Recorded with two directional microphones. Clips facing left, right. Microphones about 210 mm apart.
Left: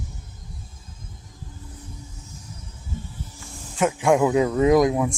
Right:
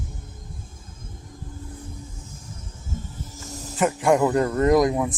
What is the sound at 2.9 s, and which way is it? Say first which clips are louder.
Music: even; 45° right (ahead or behind).